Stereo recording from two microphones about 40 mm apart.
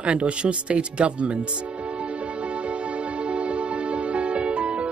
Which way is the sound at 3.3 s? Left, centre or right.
Right.